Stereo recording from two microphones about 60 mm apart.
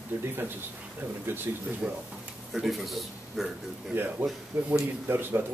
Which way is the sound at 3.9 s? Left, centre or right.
Right.